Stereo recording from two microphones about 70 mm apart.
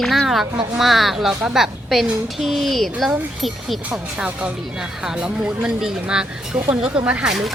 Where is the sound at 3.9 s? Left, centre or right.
Centre.